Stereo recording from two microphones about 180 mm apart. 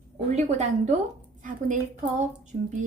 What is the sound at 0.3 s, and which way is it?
A woman's voice, 40° right (ahead or behind).